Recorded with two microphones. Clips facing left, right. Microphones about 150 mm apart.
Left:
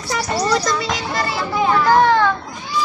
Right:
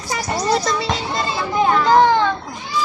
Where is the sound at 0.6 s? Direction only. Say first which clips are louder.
Even; 30° right (ahead or behind).